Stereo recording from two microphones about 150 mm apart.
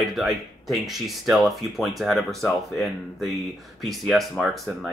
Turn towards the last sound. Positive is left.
turn(degrees=0)  # may be behind; listen again after turning